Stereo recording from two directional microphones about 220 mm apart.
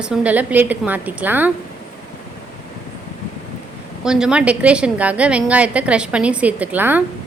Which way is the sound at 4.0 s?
Centre (ahead or behind).